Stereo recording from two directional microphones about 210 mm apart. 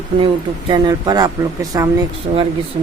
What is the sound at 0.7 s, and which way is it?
A woman's voice, 20° right (ahead or behind).